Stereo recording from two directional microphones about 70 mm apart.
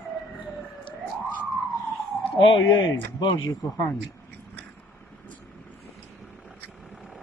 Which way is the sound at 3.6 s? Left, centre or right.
Left.